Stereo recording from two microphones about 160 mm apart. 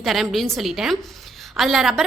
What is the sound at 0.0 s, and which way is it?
A woman's voice, centre (ahead or behind).